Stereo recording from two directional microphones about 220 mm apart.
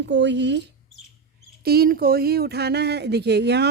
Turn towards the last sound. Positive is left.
turn(degrees=-50)  # may be behind; listen again after turning